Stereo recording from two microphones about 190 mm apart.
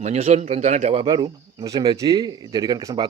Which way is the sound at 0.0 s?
35° right (ahead or behind).